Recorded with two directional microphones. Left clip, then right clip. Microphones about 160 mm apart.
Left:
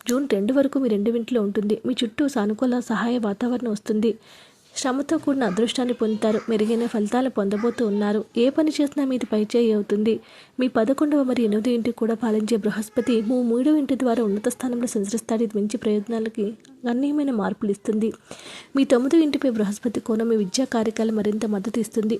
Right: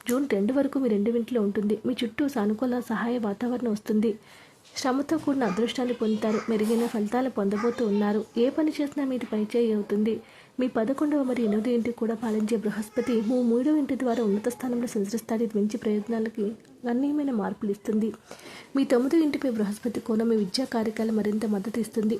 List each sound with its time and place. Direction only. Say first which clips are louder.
0.1 s speech: left 4 dB; 20° left (ahead or behind)